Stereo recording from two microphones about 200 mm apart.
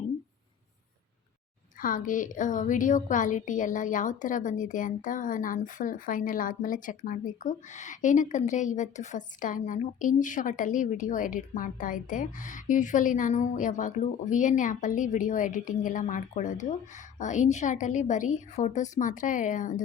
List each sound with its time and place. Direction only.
1.8 s a woman's voice: 40° left (ahead or behind)